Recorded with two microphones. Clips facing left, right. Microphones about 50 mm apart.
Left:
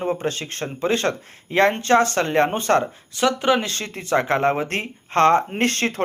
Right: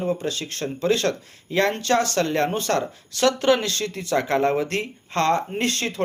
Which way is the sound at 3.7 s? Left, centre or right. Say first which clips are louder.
Left 2 dB; left.